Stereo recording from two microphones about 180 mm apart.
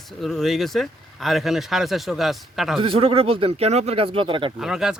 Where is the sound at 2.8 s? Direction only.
30° right (ahead or behind).